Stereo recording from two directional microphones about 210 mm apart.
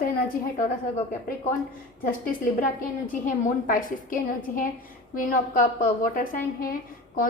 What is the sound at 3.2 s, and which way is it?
A woman's voice, 40° left (ahead or behind).